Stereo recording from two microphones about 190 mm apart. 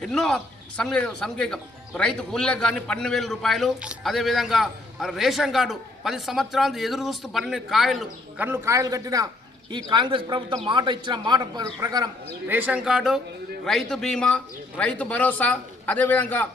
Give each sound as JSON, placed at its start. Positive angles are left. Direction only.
{"t": 0.0, "sound": "speech", "side_deg": 0}